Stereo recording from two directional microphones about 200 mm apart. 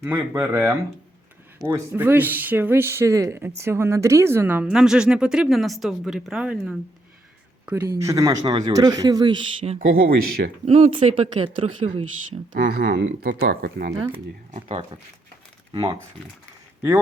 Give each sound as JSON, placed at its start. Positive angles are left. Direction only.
{"t": 0.0, "sound": "speech", "side_deg": -10}
{"t": 9.9, "sound": "speech", "side_deg": -50}
{"t": 10.7, "sound": "speech", "side_deg": -30}
{"t": 12.5, "sound": "speech", "side_deg": -50}
{"t": 14.5, "sound": "speech", "side_deg": -30}